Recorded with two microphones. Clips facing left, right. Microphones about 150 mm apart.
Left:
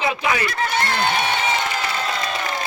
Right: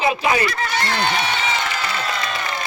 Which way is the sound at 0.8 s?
50° left (ahead or behind).